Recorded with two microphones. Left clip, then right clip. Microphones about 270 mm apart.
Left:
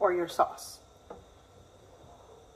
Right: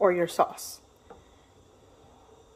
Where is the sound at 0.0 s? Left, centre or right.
Right.